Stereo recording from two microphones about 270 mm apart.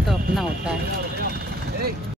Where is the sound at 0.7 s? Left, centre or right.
Right.